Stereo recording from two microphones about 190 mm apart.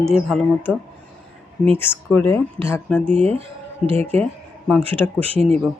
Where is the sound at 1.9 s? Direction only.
5° right (ahead or behind).